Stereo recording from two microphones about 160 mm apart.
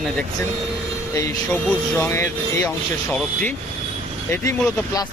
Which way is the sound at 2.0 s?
15° left (ahead or behind).